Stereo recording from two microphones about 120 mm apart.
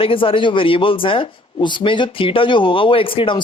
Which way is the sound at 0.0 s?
50° left (ahead or behind).